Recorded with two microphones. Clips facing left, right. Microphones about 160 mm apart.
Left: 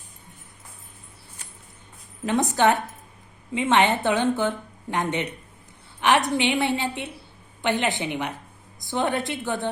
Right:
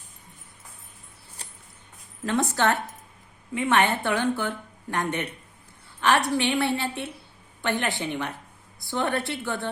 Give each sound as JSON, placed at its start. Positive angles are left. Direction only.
{"t": 1.4, "sound": "mouse", "side_deg": -35}
{"t": 2.2, "sound": "a woman's voice", "side_deg": 15}